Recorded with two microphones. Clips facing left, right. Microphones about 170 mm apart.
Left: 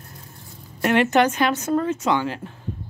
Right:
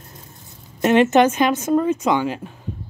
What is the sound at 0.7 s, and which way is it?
Speech, 20° right (ahead or behind).